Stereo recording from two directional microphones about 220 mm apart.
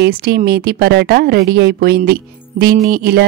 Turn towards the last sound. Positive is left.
turn(degrees=-45)  # may be behind; listen again after turning